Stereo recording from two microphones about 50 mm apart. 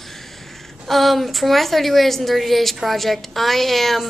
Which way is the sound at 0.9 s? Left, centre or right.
Centre.